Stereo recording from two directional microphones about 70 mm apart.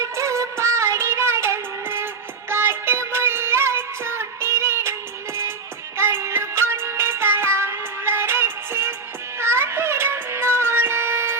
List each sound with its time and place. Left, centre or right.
0.0 s music: right
6.0 s music: right